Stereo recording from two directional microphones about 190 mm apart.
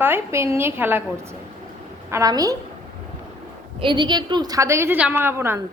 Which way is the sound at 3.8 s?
25° right (ahead or behind).